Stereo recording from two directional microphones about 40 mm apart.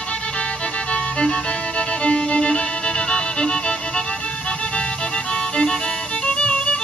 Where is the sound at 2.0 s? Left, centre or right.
Centre.